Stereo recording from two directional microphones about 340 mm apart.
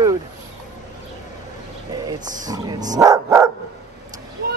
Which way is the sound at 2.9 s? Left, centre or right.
Centre.